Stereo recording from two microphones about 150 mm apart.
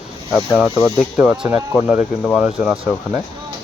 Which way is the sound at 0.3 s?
5° right (ahead or behind).